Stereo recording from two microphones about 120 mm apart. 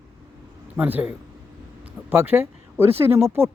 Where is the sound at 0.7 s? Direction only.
15° right (ahead or behind).